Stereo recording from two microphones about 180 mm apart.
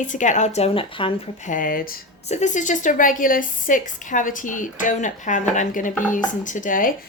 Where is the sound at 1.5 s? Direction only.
50° left (ahead or behind).